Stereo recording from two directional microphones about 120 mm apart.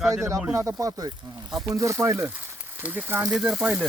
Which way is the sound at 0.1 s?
25° right (ahead or behind).